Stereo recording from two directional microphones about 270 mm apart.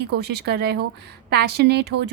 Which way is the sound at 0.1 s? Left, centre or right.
Right.